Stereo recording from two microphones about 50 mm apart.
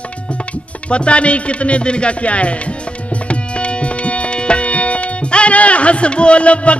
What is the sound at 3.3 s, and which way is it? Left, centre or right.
Tabla, left.